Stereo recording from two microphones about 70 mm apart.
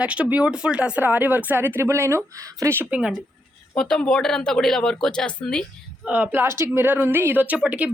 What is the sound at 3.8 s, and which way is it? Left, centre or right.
Speech, centre.